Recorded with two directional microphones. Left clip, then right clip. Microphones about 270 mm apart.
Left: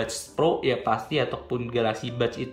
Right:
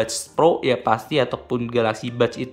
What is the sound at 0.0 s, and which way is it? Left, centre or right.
Speech, centre.